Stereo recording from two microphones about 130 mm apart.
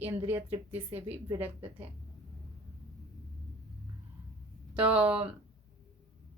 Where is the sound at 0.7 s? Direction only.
50° right (ahead or behind).